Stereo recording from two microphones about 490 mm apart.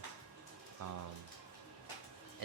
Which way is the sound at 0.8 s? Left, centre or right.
Right.